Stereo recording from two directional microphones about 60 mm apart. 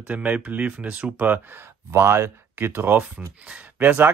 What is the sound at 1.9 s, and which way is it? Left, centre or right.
Speech, right.